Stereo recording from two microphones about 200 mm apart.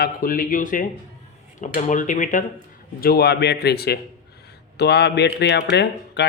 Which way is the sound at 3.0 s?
50° left (ahead or behind).